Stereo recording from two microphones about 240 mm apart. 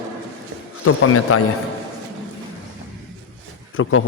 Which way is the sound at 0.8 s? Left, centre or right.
Left.